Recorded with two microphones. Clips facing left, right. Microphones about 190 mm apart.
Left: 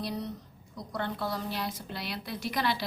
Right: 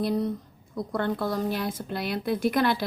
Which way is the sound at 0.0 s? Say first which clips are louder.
Right 9 dB; 50° right (ahead or behind).